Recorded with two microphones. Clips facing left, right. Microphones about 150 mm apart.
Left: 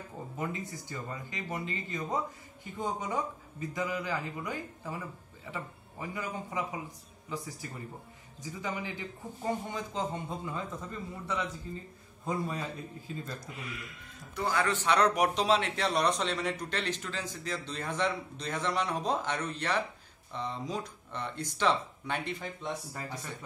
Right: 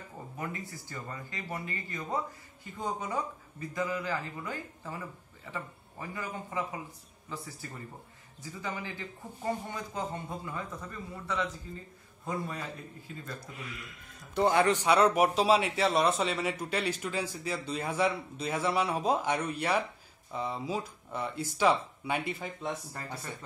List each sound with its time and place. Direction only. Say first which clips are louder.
0.4 s a man's voice: left 2 dB; 20° left (ahead or behind)
14.3 s a man's voice: right 5 dB; 25° right (ahead or behind); by 22.7 s 10° right (ahead or behind)